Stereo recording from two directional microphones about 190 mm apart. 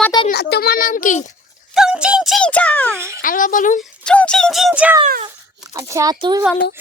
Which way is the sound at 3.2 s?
45° left (ahead or behind).